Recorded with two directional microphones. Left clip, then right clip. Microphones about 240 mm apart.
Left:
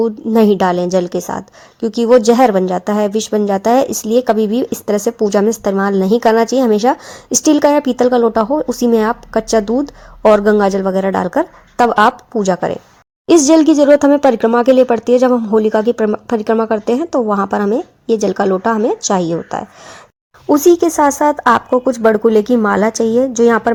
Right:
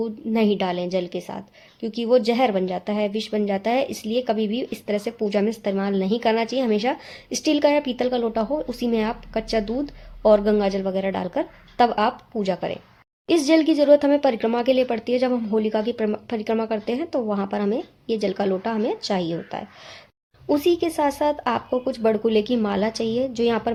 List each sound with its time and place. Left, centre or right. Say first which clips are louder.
0.0 s speech: left 11 dB; left
20.9 s speech: left 9 dB; centre